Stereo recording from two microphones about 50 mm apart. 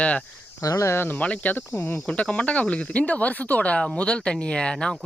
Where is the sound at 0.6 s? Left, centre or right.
Left.